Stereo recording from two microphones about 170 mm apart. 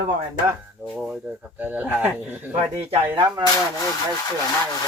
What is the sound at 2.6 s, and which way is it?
Speech, 35° right (ahead or behind).